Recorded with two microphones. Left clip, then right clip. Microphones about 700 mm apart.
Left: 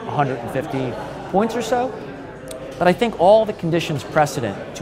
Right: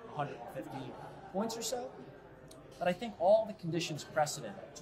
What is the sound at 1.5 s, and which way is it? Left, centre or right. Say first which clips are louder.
Speech: left 19 dB; left.